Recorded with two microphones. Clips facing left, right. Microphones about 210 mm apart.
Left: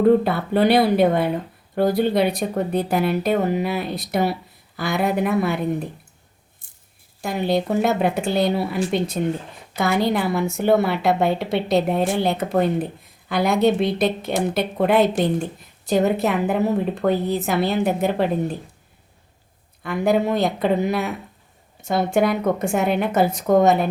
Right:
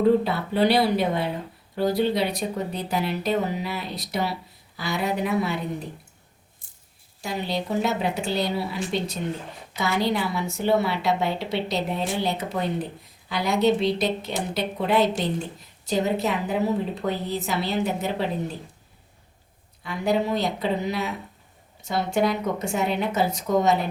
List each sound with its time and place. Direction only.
0.0 s a woman's voice: 55° left (ahead or behind)
7.2 s a woman's voice: 55° left (ahead or behind)
19.8 s a woman's voice: 55° left (ahead or behind)